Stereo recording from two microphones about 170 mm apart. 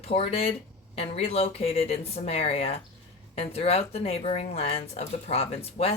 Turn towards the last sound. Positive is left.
turn(degrees=35)  # may be behind; listen again after turning